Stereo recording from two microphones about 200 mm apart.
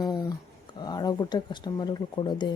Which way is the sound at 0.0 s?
20° left (ahead or behind).